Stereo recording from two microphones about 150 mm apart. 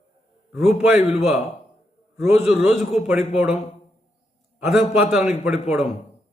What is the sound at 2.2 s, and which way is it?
Speech, 15° right (ahead or behind).